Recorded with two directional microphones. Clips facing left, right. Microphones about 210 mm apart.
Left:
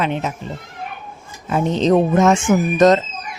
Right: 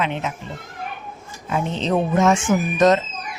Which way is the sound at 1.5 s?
40° left (ahead or behind).